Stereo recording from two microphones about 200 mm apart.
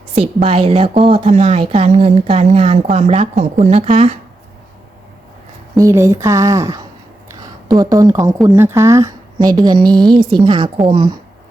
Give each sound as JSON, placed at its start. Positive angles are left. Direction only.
{"t": 0.4, "sound": "speech", "side_deg": -25}
{"t": 5.7, "sound": "a woman's voice", "side_deg": -15}